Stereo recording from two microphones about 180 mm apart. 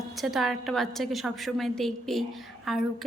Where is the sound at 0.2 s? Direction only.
Centre (ahead or behind).